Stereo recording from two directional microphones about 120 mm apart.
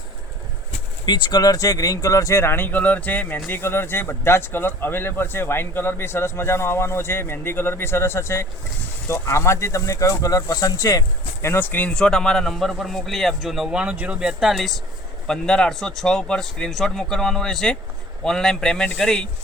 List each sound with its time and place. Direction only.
1.0 s speech: 40° left (ahead or behind)
11.4 s a man's voice: 15° left (ahead or behind)